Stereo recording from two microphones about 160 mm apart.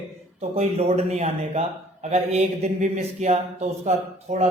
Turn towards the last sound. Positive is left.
turn(degrees=-45)  # may be behind; listen again after turning